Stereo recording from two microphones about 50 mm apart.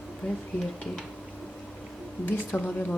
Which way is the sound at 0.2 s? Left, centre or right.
Left.